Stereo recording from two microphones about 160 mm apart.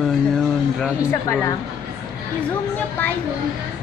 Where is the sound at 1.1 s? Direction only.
15° left (ahead or behind).